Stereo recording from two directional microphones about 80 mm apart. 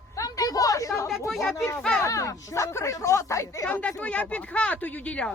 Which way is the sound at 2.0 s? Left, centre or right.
Left.